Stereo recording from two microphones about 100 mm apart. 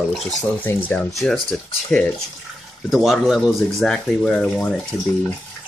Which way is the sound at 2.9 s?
Centre (ahead or behind).